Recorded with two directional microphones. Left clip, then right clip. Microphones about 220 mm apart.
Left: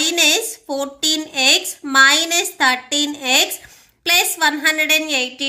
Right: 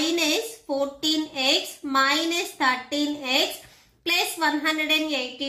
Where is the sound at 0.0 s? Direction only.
50° left (ahead or behind).